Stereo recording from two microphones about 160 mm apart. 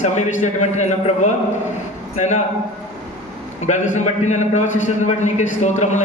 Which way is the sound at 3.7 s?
45° left (ahead or behind).